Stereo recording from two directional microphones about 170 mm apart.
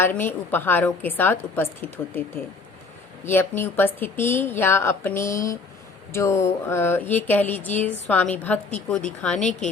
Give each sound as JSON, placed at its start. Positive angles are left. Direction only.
{"t": 0.0, "sound": "a woman's voice", "side_deg": 10}
{"t": 3.2, "sound": "a woman's voice", "side_deg": 10}
{"t": 9.4, "sound": "speech", "side_deg": 45}